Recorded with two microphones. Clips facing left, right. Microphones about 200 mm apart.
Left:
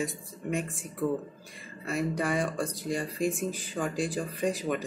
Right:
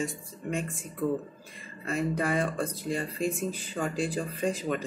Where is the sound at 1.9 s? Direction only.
Centre (ahead or behind).